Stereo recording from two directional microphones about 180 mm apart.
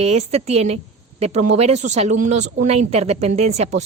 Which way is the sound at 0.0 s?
35° right (ahead or behind).